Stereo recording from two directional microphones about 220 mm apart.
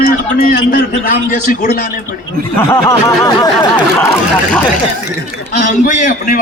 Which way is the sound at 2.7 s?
15° left (ahead or behind).